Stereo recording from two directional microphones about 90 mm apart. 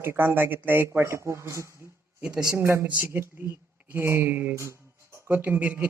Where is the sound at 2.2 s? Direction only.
10° right (ahead or behind).